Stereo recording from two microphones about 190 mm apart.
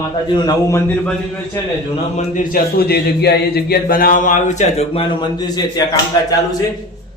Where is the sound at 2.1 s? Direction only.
45° left (ahead or behind); by 5.8 s 20° left (ahead or behind).